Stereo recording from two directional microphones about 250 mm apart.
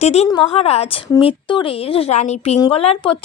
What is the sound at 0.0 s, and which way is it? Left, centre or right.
Speech, left.